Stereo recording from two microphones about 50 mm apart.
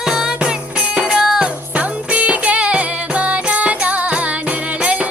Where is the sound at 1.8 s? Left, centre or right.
Right.